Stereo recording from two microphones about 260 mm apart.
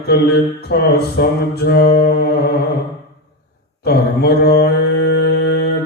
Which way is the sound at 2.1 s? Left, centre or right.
Left.